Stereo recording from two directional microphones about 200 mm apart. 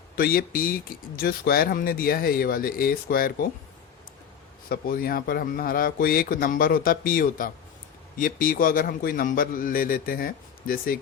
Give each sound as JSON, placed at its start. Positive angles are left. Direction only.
{"t": 0.2, "sound": "speech", "side_deg": 45}
{"t": 4.7, "sound": "speech", "side_deg": 45}